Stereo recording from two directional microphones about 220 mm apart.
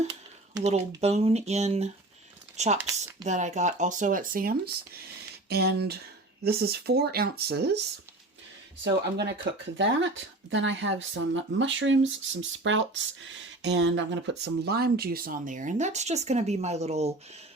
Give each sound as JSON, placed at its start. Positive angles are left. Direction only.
{"t": 0.6, "sound": "speech", "side_deg": -30}
{"t": 8.8, "sound": "speech", "side_deg": -50}